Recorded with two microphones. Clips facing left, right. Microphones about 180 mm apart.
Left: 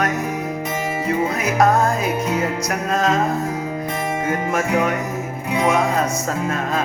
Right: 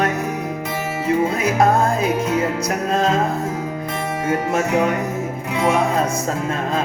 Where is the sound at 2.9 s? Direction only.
30° right (ahead or behind).